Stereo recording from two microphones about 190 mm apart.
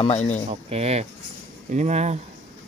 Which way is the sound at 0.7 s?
35° right (ahead or behind).